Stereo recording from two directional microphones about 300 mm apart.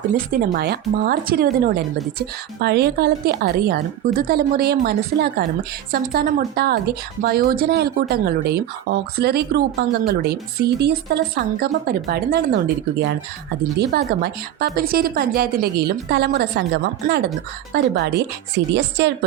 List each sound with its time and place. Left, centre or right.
0.3 s speech: right
13.7 s speech: right